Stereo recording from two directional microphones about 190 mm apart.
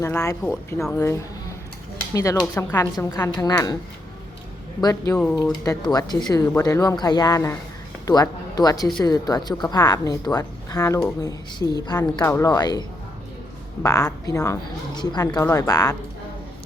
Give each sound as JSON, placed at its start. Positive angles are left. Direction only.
{"t": 0.0, "sound": "a woman's voice", "side_deg": 15}
{"t": 4.8, "sound": "a woman's voice", "side_deg": 20}
{"t": 5.1, "sound": "speech", "side_deg": 5}
{"t": 5.4, "sound": "a woman's voice", "side_deg": 20}
{"t": 13.8, "sound": "a woman's voice", "side_deg": 15}